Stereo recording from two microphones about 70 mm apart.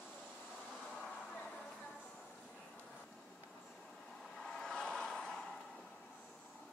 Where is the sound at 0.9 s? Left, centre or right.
Centre.